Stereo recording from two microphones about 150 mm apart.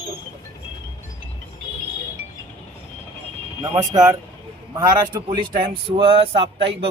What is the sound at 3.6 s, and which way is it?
A man's voice, 25° right (ahead or behind).